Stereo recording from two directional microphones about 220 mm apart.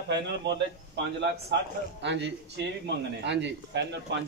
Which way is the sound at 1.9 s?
50° right (ahead or behind).